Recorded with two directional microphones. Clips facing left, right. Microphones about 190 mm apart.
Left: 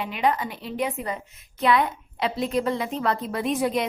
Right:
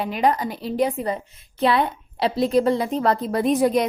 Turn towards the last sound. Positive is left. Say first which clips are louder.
# right 5 dB
turn(degrees=-40)  # may be behind; listen again after turning